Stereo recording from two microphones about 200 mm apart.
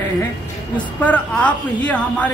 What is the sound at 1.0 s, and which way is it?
A man's voice, 5° left (ahead or behind).